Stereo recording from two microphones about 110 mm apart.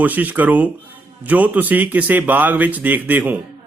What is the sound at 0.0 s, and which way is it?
A man's voice, 15° right (ahead or behind).